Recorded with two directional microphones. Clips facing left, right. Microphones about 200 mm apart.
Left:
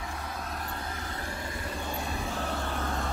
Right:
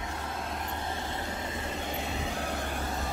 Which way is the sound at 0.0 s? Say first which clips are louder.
Right 1 dB; 25° right (ahead or behind).